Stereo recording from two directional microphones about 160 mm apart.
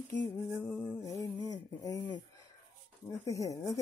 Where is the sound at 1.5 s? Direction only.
25° left (ahead or behind).